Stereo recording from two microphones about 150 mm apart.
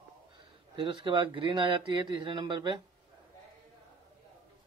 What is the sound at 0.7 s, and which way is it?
Speech, 35° right (ahead or behind).